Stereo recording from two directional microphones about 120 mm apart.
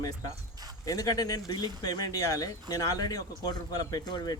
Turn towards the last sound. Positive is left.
turn(degrees=35)  # may be behind; listen again after turning